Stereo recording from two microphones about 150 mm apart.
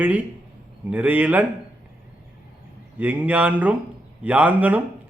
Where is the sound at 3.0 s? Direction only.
10° right (ahead or behind).